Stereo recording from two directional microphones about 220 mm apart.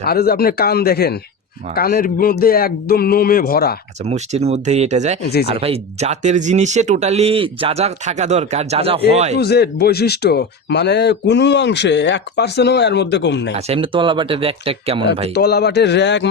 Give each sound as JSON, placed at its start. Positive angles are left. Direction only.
{"t": 0.0, "sound": "a man's voice", "side_deg": 45}
{"t": 4.0, "sound": "speech", "side_deg": -30}
{"t": 9.4, "sound": "speech", "side_deg": 45}
{"t": 13.7, "sound": "speech", "side_deg": -25}
{"t": 15.4, "sound": "speech", "side_deg": 50}